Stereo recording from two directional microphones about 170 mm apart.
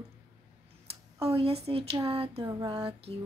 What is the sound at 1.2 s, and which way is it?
A woman's voice, 35° right (ahead or behind).